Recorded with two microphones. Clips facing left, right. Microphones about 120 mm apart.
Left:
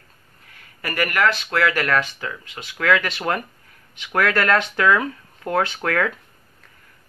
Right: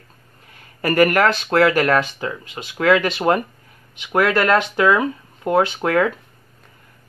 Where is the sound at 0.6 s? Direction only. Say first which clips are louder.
Right 10 dB; 35° right (ahead or behind); by 6.1 s 15° right (ahead or behind).